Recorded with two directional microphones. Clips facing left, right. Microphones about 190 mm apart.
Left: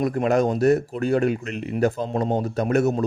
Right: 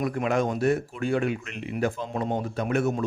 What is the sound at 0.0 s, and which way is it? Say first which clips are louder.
Speech: left 5 dB; 40° left (ahead or behind).